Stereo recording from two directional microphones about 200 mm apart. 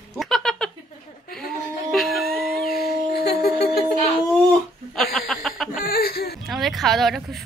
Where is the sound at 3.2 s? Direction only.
50° left (ahead or behind).